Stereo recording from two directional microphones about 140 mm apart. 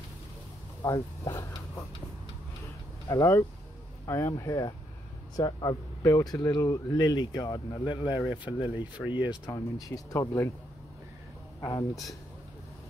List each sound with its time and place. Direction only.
0.8 s speech: 25° left (ahead or behind)
3.1 s speech: 20° left (ahead or behind)
11.6 s speech: 25° left (ahead or behind)